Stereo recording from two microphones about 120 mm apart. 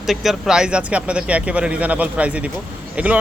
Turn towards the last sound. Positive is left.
turn(degrees=-10)  # may be behind; listen again after turning